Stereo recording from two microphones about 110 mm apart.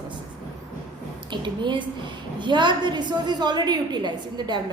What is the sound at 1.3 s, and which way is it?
A woman's voice, 45° right (ahead or behind).